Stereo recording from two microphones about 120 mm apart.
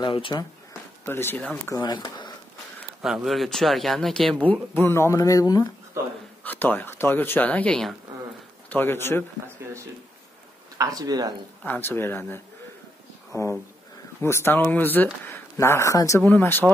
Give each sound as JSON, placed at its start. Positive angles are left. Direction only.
{"t": 0.0, "sound": "speech", "side_deg": 45}
{"t": 1.0, "sound": "speech", "side_deg": 20}
{"t": 1.7, "sound": "speech", "side_deg": 40}
{"t": 3.0, "sound": "speech", "side_deg": 0}
{"t": 4.5, "sound": "speech", "side_deg": 20}
{"t": 6.4, "sound": "a man's voice", "side_deg": 15}
{"t": 9.6, "sound": "a sound", "side_deg": -20}
{"t": 10.8, "sound": "speech", "side_deg": -30}
{"t": 11.6, "sound": "speech", "side_deg": 15}
{"t": 13.3, "sound": "a sound", "side_deg": 25}
{"t": 14.2, "sound": "speech", "side_deg": 20}
{"t": 16.2, "sound": "speech", "side_deg": 15}